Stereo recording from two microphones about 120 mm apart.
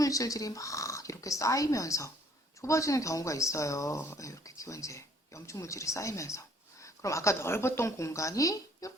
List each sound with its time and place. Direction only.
0.0 s speech: 30° left (ahead or behind)